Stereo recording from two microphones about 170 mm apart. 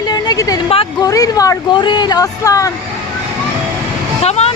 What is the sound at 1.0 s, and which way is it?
Speech, 20° left (ahead or behind).